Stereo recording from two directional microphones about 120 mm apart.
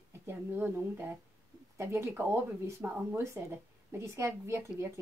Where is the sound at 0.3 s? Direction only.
20° right (ahead or behind).